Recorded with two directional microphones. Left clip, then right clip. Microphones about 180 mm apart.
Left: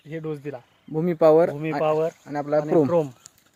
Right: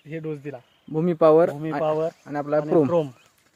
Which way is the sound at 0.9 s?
10° right (ahead or behind).